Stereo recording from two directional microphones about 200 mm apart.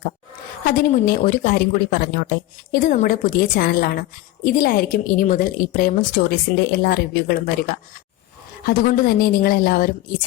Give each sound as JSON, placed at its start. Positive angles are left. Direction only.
{"t": 0.6, "sound": "a woman's voice", "side_deg": 45}
{"t": 8.6, "sound": "a woman's voice", "side_deg": 45}